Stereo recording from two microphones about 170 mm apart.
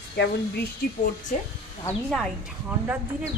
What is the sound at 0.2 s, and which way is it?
Speech, 90° left.